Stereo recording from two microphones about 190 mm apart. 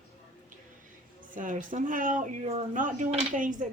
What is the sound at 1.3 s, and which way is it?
Speech, 45° right (ahead or behind).